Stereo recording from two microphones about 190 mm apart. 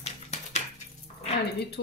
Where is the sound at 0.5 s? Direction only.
35° left (ahead or behind).